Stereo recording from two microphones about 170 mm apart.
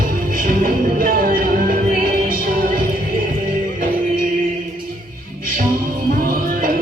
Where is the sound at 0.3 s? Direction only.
55° right (ahead or behind).